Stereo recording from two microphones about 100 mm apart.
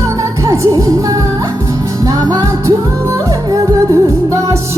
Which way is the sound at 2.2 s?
40° right (ahead or behind).